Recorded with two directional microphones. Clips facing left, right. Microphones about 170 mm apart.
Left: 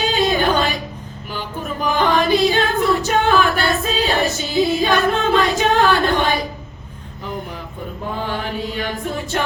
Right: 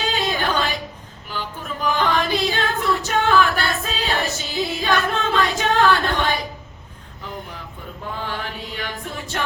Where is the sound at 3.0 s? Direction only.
15° left (ahead or behind).